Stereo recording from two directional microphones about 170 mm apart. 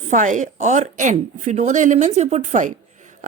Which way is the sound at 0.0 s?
45° right (ahead or behind).